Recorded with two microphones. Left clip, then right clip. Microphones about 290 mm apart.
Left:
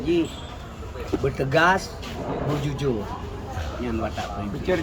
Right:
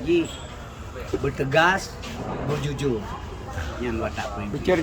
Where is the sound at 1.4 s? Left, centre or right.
Centre.